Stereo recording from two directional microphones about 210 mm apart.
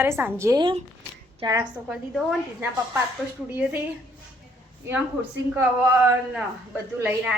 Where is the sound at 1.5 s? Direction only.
5° right (ahead or behind).